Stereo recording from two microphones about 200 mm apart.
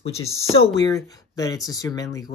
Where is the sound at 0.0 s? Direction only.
30° left (ahead or behind).